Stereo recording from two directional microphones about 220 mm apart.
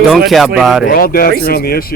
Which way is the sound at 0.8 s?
40° left (ahead or behind).